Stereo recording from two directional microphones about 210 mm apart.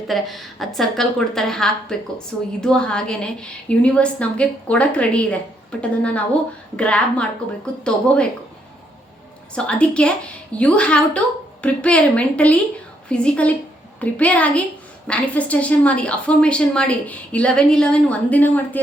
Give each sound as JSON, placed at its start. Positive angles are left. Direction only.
{"t": 0.1, "sound": "a woman's voice", "side_deg": 0}
{"t": 9.6, "sound": "a woman's voice", "side_deg": 5}